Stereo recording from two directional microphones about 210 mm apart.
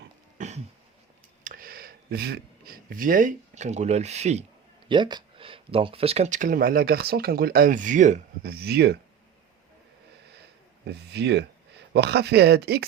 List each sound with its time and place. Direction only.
0.3 s a sound: 35° right (ahead or behind)
1.5 s speech: 45° right (ahead or behind)
4.9 s speech: 20° right (ahead or behind)
8.5 s speech: 50° right (ahead or behind)
10.8 s speech: 50° right (ahead or behind)